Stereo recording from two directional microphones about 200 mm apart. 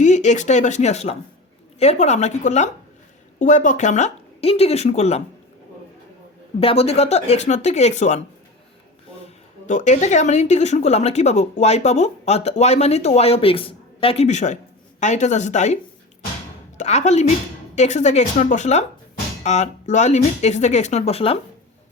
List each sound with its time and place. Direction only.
0.0 s a woman's voice: 35° left (ahead or behind)
6.6 s a woman's voice: 30° left (ahead or behind)
9.6 s a woman's voice: 40° left (ahead or behind)